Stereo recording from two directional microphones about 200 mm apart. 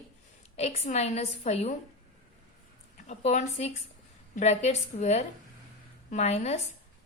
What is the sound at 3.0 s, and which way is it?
A woman's voice, 35° left (ahead or behind).